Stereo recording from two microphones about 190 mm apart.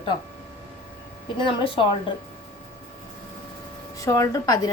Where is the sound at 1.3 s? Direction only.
25° left (ahead or behind).